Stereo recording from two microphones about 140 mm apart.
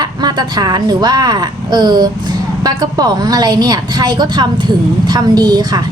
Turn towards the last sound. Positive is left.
turn(degrees=-30)  # may be behind; listen again after turning